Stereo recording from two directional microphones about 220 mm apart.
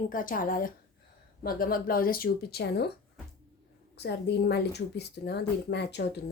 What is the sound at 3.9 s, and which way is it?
A woman's voice, 50° left (ahead or behind).